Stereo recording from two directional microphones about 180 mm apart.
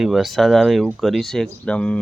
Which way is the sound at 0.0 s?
Centre (ahead or behind).